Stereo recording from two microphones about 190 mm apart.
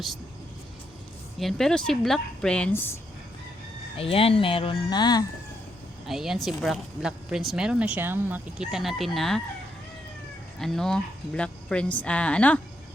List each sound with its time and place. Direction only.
1.4 s speech: centre (ahead or behind)
3.9 s speech: 30° left (ahead or behind)
6.1 s speech: centre (ahead or behind)
10.6 s speech: centre (ahead or behind)